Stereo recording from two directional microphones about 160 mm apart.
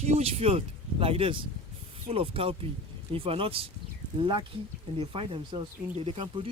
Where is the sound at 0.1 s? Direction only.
40° right (ahead or behind).